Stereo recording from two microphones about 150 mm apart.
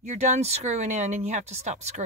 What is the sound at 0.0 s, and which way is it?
Speech, 50° right (ahead or behind).